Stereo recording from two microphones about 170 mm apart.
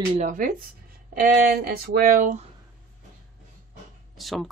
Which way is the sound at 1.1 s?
65° right (ahead or behind).